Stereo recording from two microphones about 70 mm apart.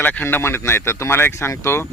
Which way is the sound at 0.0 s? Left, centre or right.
Left.